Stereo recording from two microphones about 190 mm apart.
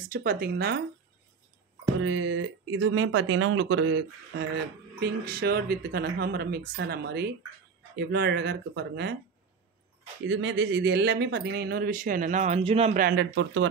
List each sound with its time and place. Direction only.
0.1 s speech: 50° right (ahead or behind)
2.0 s speech: 90° right; by 4.5 s 65° right (ahead or behind)
5.0 s speech: 55° right (ahead or behind)
10.2 s speech: 75° right (ahead or behind); by 12.9 s 30° right (ahead or behind)
12.9 s speech: 55° right (ahead or behind); by 13.7 s 70° right (ahead or behind)